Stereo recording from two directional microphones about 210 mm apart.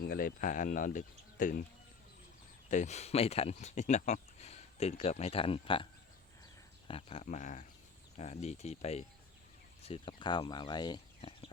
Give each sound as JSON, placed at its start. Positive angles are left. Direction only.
{"t": 0.0, "sound": "speech", "side_deg": 45}
{"t": 2.6, "sound": "speech", "side_deg": 35}